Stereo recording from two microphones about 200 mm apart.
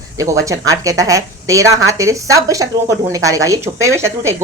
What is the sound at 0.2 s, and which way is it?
A woman's voice, 15° right (ahead or behind).